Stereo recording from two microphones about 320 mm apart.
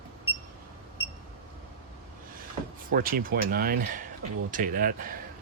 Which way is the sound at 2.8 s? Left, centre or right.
Right.